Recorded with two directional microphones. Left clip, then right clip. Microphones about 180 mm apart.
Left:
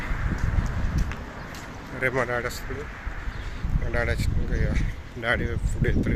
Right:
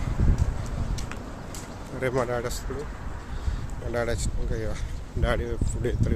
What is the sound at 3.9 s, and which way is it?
Speech, 25° right (ahead or behind).